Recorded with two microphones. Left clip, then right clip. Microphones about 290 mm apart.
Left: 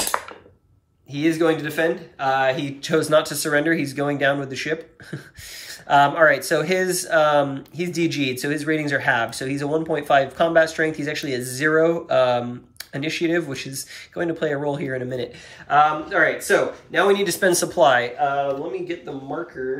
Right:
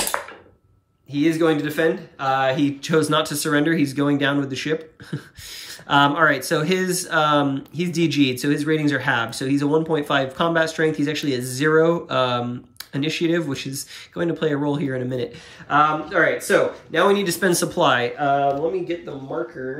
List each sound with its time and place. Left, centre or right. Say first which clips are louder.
0.1 s a sound: left 1 dB; left
1.1 s speech: right 1 dB; centre
19.6 s speech: left 2 dB; centre